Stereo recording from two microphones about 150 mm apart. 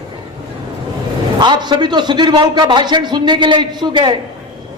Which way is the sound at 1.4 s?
30° right (ahead or behind).